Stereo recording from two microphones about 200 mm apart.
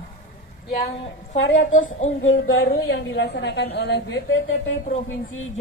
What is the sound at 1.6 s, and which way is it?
Speech, 40° left (ahead or behind).